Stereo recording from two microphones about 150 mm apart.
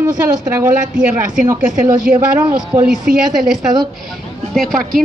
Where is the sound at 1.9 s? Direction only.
30° right (ahead or behind).